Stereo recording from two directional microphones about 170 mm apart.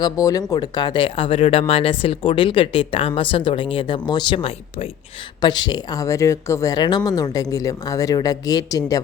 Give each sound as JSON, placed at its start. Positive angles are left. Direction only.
{"t": 0.0, "sound": "speech", "side_deg": 20}